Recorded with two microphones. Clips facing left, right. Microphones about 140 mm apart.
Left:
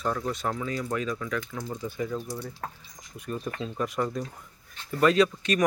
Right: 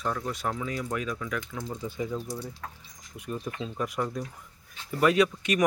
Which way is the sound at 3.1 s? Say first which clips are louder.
Left 1 dB; 15° right (ahead or behind).